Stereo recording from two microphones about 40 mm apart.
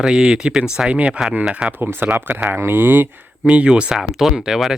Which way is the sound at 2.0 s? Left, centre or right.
Right.